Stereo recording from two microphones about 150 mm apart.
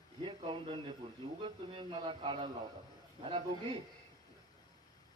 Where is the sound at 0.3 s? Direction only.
35° right (ahead or behind).